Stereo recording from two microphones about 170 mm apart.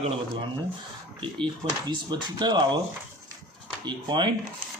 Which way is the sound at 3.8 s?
25° right (ahead or behind).